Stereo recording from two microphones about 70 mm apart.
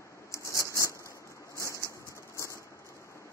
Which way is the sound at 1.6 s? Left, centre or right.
Left.